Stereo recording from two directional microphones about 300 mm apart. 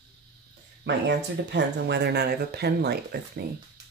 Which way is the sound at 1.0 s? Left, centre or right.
Right.